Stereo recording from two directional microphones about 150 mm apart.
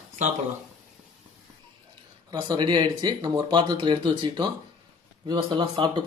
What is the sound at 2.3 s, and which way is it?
Speech, 30° right (ahead or behind).